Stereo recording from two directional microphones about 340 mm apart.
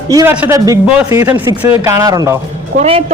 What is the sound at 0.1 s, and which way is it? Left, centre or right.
A woman's voice, centre.